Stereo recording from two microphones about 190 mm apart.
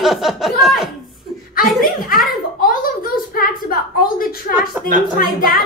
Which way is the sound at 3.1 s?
50° left (ahead or behind).